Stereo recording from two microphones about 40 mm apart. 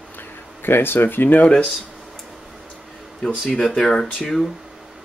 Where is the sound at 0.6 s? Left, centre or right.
Left.